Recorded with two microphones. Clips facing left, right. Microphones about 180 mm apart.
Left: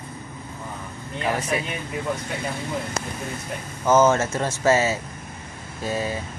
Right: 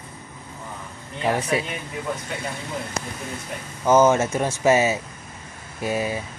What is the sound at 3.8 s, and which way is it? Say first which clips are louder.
Speech: right 1 dB; 15° right (ahead or behind).